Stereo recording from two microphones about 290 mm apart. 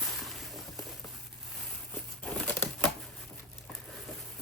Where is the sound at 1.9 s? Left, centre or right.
Centre.